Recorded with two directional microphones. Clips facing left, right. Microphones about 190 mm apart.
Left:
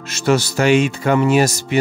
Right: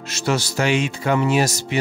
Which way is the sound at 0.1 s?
55° left (ahead or behind).